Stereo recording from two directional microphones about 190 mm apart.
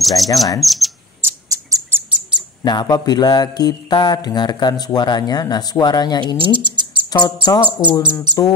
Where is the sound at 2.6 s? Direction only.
20° left (ahead or behind).